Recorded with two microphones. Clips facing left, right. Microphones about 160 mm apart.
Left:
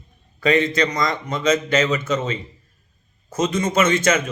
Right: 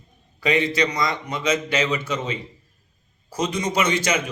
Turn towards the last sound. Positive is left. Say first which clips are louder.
# left 4 dB
turn(degrees=-10)  # may be behind; listen again after turning